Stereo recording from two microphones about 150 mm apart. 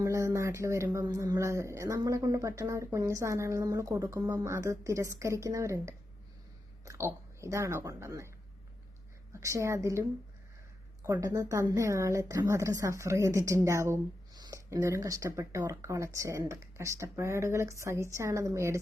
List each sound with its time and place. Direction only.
0.0 s speech: 20° right (ahead or behind)
9.3 s speech: 20° right (ahead or behind)